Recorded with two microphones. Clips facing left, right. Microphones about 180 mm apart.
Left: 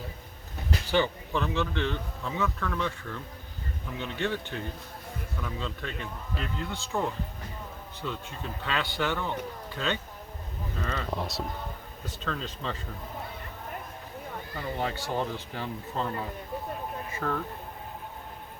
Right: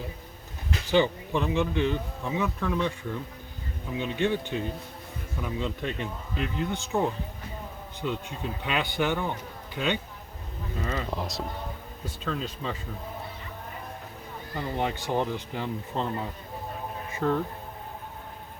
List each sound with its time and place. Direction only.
0.9 s speech: 15° right (ahead or behind); by 11.4 s centre (ahead or behind)
12.0 s speech: 10° right (ahead or behind)
14.8 s speech: 20° right (ahead or behind)
17.2 s speech: 25° right (ahead or behind)